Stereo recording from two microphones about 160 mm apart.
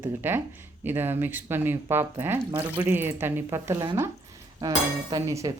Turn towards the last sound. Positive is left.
turn(degrees=-20)  # may be behind; listen again after turning